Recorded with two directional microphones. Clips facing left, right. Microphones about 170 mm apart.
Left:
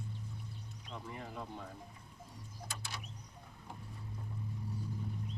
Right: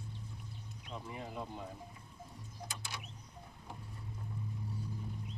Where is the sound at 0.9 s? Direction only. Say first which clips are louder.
Right 2 dB; 15° right (ahead or behind).